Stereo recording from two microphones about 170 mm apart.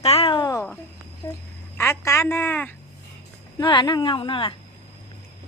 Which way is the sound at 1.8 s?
15° left (ahead or behind).